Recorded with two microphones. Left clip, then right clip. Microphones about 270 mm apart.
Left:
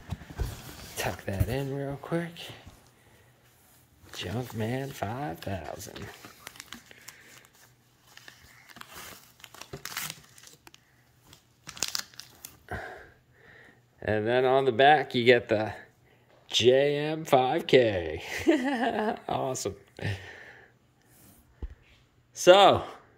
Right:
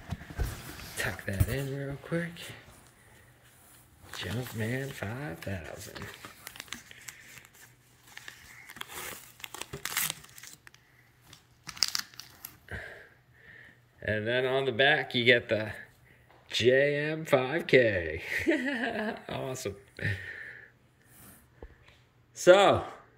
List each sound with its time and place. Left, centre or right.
0.9 s speech: centre
4.1 s speech: centre
5.9 s crumpling: centre
11.2 s crumpling: centre
13.5 s speech: centre
22.3 s speech: centre